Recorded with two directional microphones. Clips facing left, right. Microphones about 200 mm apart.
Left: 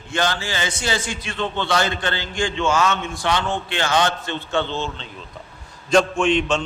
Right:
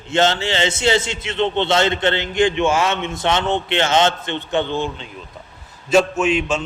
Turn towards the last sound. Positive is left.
turn(degrees=-5)  # may be behind; listen again after turning